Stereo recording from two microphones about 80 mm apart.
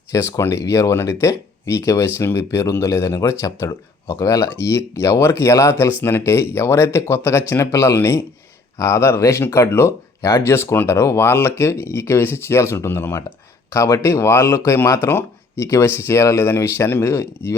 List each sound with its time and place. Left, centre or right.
0.1 s speech: left